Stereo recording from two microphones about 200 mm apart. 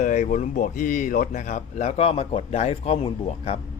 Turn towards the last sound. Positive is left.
turn(degrees=30)  # may be behind; listen again after turning